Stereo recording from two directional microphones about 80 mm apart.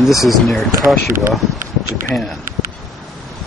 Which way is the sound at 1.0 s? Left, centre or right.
Right.